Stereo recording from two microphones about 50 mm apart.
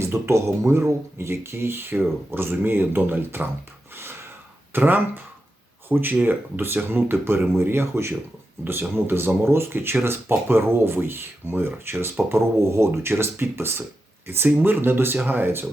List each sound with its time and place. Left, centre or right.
0.0 s speech: right
3.9 s a sound: right
4.7 s speech: right
12.3 s speech: right